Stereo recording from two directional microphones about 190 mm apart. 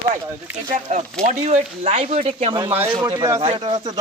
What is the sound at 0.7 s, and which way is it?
A man's voice, 40° right (ahead or behind).